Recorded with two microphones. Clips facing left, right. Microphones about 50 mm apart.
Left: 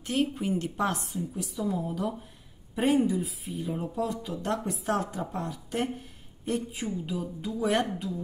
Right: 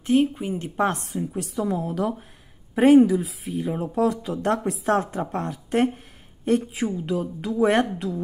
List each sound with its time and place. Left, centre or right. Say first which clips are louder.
0.0 s speech: right 7 dB; centre
1.0 s a woman's voice: right 5 dB; right
2.7 s speech: right 10 dB; right
4.9 s speech: right 5 dB; right
6.7 s speech: right 7 dB; right
8.0 s speech: right 6 dB; right